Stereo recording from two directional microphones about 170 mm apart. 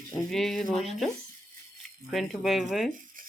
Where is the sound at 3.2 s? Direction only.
55° right (ahead or behind).